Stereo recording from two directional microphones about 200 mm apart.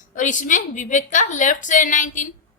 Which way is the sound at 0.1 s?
40° left (ahead or behind).